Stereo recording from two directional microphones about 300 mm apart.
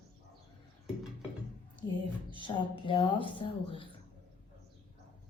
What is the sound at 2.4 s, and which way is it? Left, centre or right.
A woman's voice, centre.